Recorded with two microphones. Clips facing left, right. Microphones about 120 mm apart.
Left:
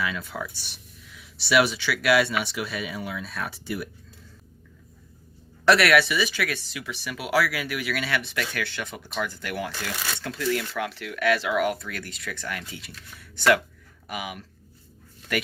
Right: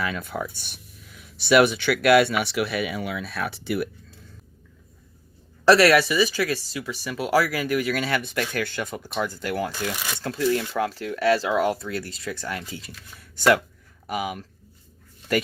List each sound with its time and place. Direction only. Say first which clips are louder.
0.0 s speech: right 2 dB; 50° right (ahead or behind)
2.4 s speech: right 6 dB; 65° right (ahead or behind)
5.6 s speech: right 3 dB; 35° right (ahead or behind)